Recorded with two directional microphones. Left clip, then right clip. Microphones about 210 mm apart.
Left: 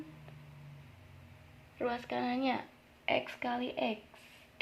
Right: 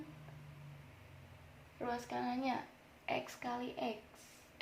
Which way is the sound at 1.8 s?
35° left (ahead or behind).